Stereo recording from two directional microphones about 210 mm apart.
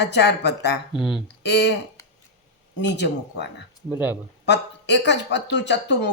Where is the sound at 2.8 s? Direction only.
55° left (ahead or behind).